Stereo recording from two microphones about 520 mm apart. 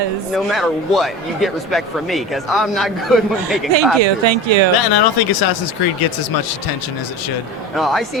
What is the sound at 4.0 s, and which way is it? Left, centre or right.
Speech, right.